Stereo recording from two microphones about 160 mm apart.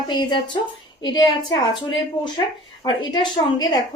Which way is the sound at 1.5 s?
30° left (ahead or behind).